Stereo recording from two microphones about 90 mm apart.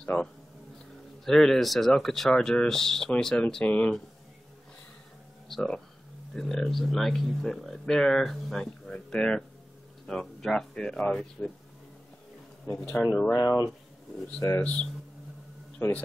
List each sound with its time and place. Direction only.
0.0 s speech: 15° left (ahead or behind)
5.5 s speech: 5° left (ahead or behind)
13.0 s speech: 15° left (ahead or behind)
13.4 s speech: 45° left (ahead or behind)
14.6 s speech: 15° left (ahead or behind)